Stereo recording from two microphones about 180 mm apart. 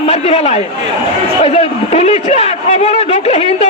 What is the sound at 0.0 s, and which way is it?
A man's voice, 35° left (ahead or behind).